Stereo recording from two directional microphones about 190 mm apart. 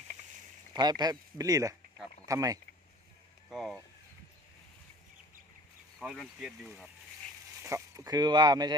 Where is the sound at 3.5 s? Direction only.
Centre (ahead or behind).